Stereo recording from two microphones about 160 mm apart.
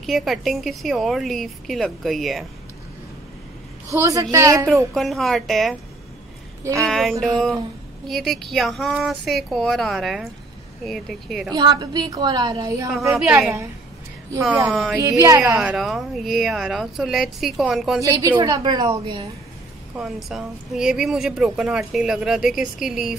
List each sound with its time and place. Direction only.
0.0 s a woman's voice: centre (ahead or behind)
3.9 s a woman's voice: 20° right (ahead or behind)
4.9 s a woman's voice: centre (ahead or behind)
6.8 s a woman's voice: centre (ahead or behind)
11.5 s a woman's voice: 25° right (ahead or behind)
14.4 s speech: 5° right (ahead or behind)
15.0 s a woman's voice: 20° right (ahead or behind); by 18.0 s centre (ahead or behind)
18.0 s a woman's voice: 20° right (ahead or behind)
20.0 s a woman's voice: centre (ahead or behind)